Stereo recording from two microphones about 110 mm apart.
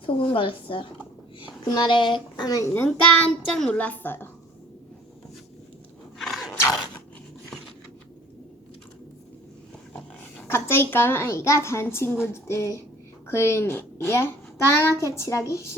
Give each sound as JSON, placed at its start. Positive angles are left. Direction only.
{"t": 0.0, "sound": "a woman's voice", "side_deg": 50}
{"t": 2.7, "sound": "a woman's voice", "side_deg": 20}
{"t": 3.4, "sound": "a woman's voice", "side_deg": 5}
{"t": 3.8, "sound": "a woman's voice", "side_deg": 15}
{"t": 6.1, "sound": "a sound", "side_deg": 0}
{"t": 10.5, "sound": "a woman's voice", "side_deg": 20}